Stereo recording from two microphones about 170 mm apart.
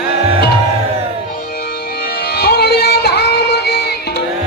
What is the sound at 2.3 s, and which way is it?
Music, 65° left (ahead or behind).